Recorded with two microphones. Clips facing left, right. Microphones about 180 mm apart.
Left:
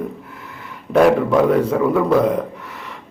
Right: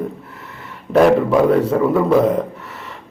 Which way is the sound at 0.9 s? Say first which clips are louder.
Right 1 dB; 5° right (ahead or behind).